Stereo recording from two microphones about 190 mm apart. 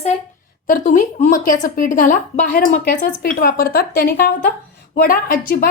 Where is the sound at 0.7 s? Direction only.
40° left (ahead or behind).